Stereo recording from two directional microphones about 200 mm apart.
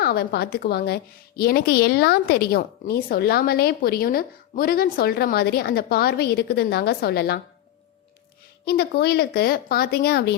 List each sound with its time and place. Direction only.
0.0 s a woman's voice: 50° left (ahead or behind)
8.6 s a woman's voice: 50° left (ahead or behind)